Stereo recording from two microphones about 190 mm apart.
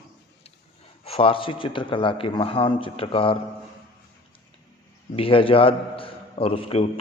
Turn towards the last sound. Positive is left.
turn(degrees=30)  # may be behind; listen again after turning